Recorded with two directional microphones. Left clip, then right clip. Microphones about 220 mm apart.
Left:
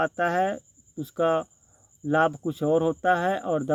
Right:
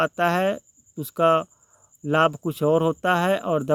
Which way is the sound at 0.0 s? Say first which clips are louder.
Right 3 dB; 35° right (ahead or behind).